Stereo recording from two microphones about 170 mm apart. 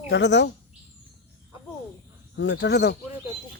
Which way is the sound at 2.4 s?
90° left.